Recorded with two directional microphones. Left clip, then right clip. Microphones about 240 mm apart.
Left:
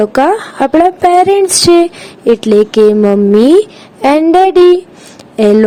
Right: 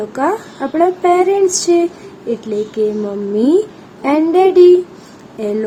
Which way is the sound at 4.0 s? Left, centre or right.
Left.